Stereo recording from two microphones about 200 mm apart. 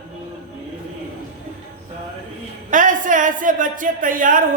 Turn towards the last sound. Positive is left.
turn(degrees=-45)  # may be behind; listen again after turning